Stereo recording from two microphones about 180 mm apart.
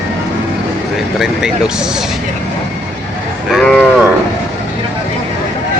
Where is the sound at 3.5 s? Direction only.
Centre (ahead or behind).